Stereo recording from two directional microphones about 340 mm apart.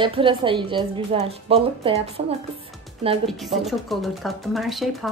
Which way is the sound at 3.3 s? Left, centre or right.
Centre.